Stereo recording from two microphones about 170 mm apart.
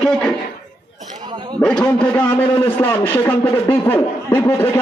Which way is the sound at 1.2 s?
25° right (ahead or behind).